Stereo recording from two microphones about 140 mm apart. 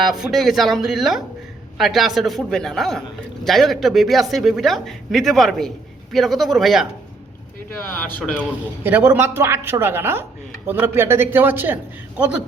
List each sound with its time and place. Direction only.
0.0 s speech: centre (ahead or behind)
8.2 s a man's voice: 10° left (ahead or behind)
8.8 s a man's voice: 15° right (ahead or behind)